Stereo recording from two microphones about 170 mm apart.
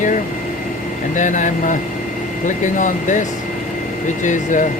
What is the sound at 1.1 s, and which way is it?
Speech, 45° left (ahead or behind).